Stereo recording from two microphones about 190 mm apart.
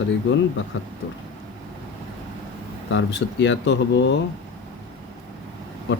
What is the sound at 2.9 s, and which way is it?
Speech, 70° left (ahead or behind).